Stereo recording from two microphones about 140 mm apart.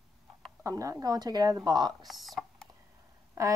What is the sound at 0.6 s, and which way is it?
Speech, 25° right (ahead or behind).